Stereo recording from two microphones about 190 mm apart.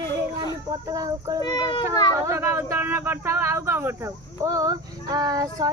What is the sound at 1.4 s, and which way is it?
Speech, 25° left (ahead or behind).